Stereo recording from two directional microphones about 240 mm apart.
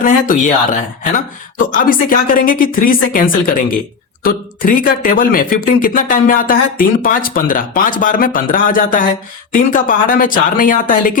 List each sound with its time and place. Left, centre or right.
0.0 s speech: left